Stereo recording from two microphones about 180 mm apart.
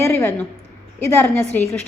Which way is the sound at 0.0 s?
15° left (ahead or behind).